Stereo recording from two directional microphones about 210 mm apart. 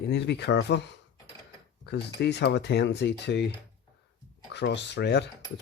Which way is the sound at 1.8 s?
50° left (ahead or behind).